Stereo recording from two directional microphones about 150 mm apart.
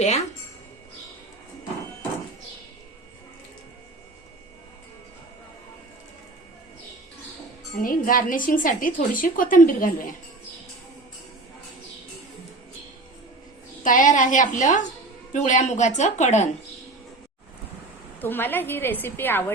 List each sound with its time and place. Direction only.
7.8 s a woman's voice: 65° left (ahead or behind)
13.8 s a woman's voice: 60° left (ahead or behind)
18.2 s a woman's voice: 15° left (ahead or behind)